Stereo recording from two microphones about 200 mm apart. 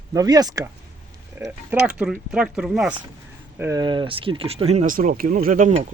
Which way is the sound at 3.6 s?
15° right (ahead or behind).